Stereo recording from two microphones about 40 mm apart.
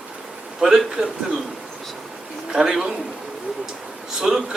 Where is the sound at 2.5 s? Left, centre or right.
Centre.